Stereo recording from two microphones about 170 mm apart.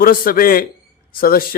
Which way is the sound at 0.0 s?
55° left (ahead or behind).